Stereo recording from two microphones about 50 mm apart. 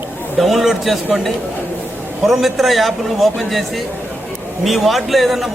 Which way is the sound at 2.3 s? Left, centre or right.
Centre.